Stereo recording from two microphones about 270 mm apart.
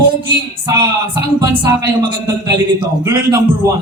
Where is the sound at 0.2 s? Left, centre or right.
Centre.